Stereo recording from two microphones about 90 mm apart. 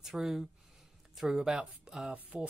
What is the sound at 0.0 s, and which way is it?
Speech, 5° right (ahead or behind).